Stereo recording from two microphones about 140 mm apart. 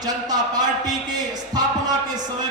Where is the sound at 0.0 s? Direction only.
30° right (ahead or behind).